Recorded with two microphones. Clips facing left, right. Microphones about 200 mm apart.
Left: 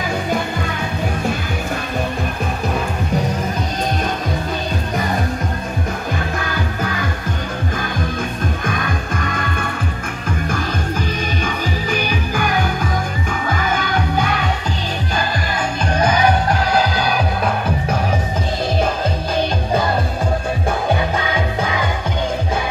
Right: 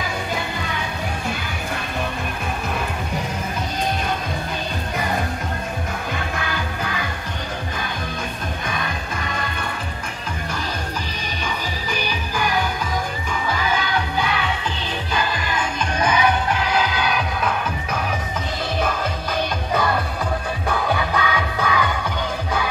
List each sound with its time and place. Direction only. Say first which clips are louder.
8.6 s music: left 5 dB; 50° left (ahead or behind)
11.4 s music: left 5 dB; 50° left (ahead or behind); by 21.9 s 25° left (ahead or behind)